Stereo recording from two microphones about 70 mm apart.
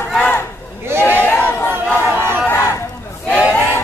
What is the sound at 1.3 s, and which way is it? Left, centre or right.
Chatter, left.